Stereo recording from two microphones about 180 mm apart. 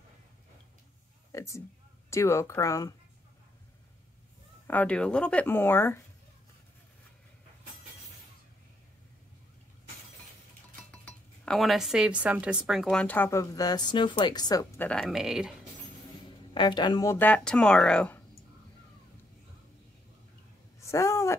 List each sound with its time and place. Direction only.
1.3 s a sound: 15° left (ahead or behind)
2.0 s speech: 15° left (ahead or behind)
4.6 s speech: 10° left (ahead or behind)
10.8 s speech: 10° left (ahead or behind)
13.0 s speech: 10° left (ahead or behind)
14.9 s speech: centre (ahead or behind)
16.5 s speech: 25° left (ahead or behind); by 18.2 s 5° left (ahead or behind)
20.8 s speech: 15° left (ahead or behind)